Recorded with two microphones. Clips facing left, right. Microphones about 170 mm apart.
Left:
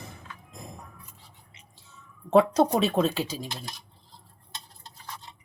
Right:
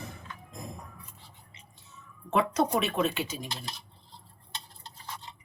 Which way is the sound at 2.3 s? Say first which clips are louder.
Left 6 dB; 30° left (ahead or behind).